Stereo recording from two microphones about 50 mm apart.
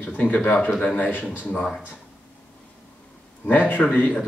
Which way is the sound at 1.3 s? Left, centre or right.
Left.